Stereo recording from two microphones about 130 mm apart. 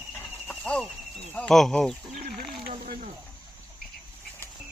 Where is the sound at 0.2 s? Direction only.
10° left (ahead or behind).